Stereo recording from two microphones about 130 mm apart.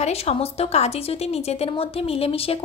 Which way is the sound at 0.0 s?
50° left (ahead or behind).